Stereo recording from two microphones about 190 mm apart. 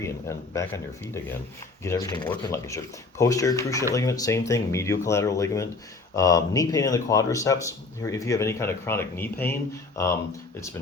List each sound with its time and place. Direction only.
0.0 s speech: 15° left (ahead or behind)